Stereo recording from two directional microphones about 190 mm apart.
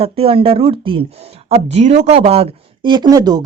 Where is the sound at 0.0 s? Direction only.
30° right (ahead or behind).